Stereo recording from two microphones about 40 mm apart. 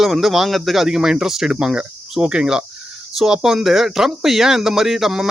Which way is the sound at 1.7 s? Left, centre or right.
Right.